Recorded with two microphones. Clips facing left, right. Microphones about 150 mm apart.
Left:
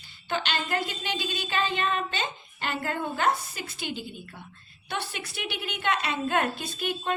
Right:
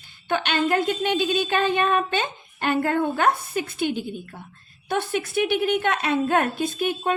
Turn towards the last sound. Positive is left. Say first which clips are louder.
# right 6 dB
turn(degrees=-50)  # may be behind; listen again after turning